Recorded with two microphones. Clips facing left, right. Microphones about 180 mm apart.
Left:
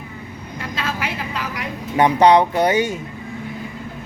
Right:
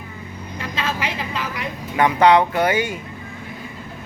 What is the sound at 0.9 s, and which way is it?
Vehicle, 10° left (ahead or behind).